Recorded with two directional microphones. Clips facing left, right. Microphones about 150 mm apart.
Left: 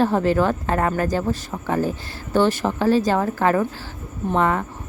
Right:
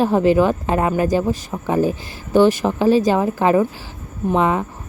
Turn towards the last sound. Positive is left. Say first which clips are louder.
# right 3 dB
turn(degrees=-15)  # may be behind; listen again after turning